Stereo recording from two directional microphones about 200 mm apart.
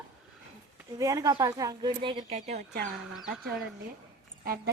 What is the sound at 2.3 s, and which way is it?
Speech, 35° right (ahead or behind).